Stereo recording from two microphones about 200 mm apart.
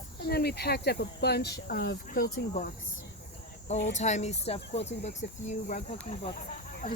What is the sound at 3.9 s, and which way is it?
Speech, 35° left (ahead or behind).